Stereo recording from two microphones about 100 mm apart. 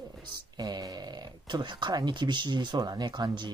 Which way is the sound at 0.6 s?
45° right (ahead or behind).